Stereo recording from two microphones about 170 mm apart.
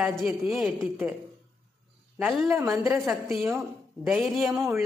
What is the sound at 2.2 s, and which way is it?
Speech, 5° right (ahead or behind).